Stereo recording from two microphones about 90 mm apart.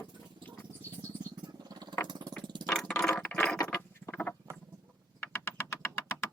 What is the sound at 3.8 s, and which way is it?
Rodents, 25° left (ahead or behind).